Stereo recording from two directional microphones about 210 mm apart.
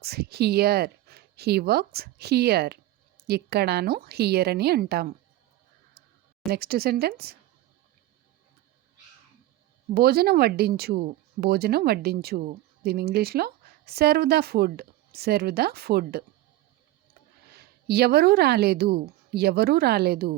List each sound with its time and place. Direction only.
0.0 s speech: 50° right (ahead or behind)
6.5 s speech: 50° right (ahead or behind)
9.9 s speech: 45° right (ahead or behind)
17.5 s a woman's voice: 50° right (ahead or behind)